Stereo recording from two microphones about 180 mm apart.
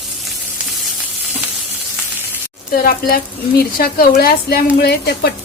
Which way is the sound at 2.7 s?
55° left (ahead or behind).